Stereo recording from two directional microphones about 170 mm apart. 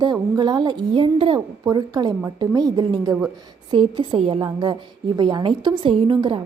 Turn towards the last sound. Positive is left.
turn(degrees=-25)  # may be behind; listen again after turning